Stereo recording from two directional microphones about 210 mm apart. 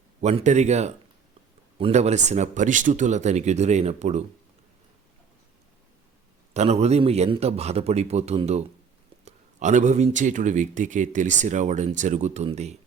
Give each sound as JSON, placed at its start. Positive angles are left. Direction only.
{"t": 0.2, "sound": "speech", "side_deg": -30}
{"t": 6.5, "sound": "speech", "side_deg": -30}